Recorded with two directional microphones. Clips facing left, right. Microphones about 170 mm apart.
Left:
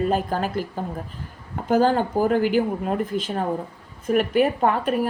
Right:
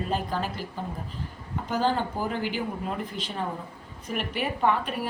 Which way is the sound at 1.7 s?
45° left (ahead or behind).